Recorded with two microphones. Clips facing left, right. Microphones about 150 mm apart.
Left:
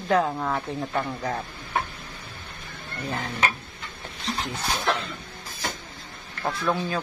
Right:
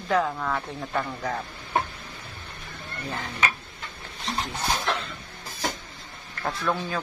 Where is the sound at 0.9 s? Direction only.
15° left (ahead or behind).